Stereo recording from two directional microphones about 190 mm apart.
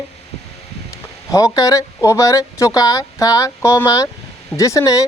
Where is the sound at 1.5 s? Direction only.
15° left (ahead or behind).